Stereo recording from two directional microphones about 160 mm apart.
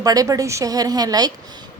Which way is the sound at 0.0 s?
20° right (ahead or behind).